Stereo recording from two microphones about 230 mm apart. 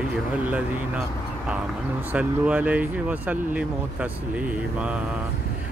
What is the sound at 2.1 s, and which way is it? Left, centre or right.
Speech, centre.